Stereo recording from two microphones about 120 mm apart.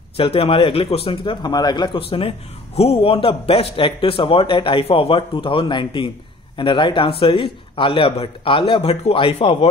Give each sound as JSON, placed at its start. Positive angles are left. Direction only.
{"t": 0.2, "sound": "a man's voice", "side_deg": 50}